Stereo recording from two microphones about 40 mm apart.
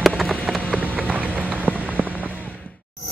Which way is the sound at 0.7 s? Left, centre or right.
Right.